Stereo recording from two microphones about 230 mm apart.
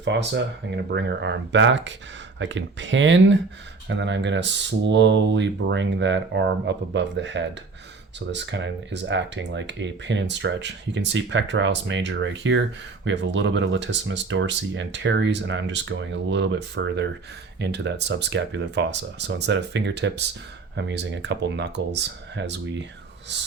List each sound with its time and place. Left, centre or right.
0.0 s speech: right